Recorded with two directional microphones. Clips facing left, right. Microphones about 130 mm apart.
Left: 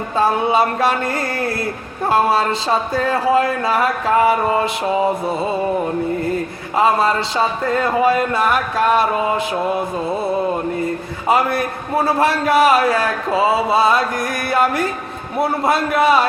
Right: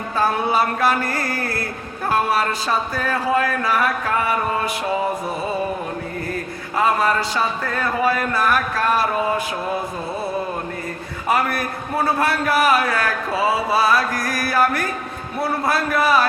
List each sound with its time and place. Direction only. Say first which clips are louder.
0.2 s a man's voice: left 4 dB; 25° left (ahead or behind)
6.7 s a man's voice: left 3 dB; 25° left (ahead or behind)
11.3 s a man's voice: left 4 dB; 25° left (ahead or behind)